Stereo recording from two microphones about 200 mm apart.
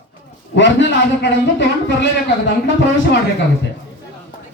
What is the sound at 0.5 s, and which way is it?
A man's voice, 65° left (ahead or behind).